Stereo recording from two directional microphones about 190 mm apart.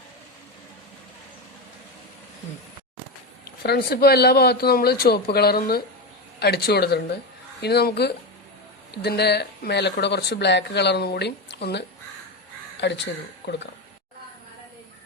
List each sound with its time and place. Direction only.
3.6 s speech: 55° left (ahead or behind)